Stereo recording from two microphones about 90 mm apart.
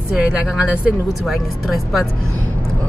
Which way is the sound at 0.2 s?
10° right (ahead or behind).